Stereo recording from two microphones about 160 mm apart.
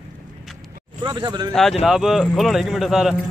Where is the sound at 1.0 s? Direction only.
30° right (ahead or behind).